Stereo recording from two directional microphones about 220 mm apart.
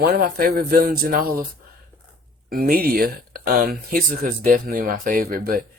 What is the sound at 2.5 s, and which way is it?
Speech, 45° right (ahead or behind).